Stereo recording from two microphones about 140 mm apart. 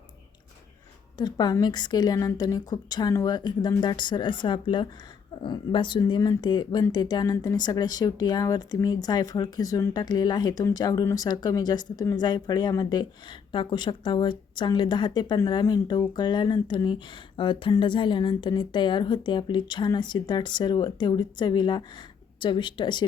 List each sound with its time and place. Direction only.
1.2 s a woman's voice: 30° left (ahead or behind)